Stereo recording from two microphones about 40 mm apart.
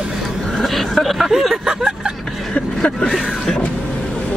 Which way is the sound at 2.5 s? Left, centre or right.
Left.